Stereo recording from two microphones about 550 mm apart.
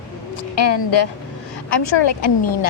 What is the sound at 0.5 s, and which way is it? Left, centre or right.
A woman's voice, left.